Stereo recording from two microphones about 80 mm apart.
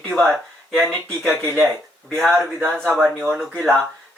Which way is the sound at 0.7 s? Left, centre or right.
Centre.